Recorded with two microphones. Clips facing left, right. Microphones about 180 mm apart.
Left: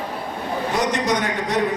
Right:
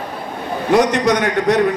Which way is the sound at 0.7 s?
70° right (ahead or behind).